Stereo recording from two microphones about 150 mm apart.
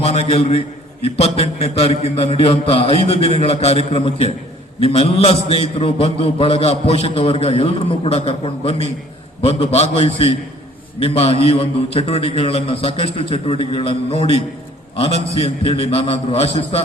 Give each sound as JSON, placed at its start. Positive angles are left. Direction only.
{"t": 0.0, "sound": "a man's voice", "side_deg": 45}